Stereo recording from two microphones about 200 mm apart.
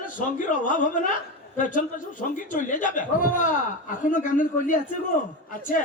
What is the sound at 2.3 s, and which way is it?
A man's voice, 40° left (ahead or behind).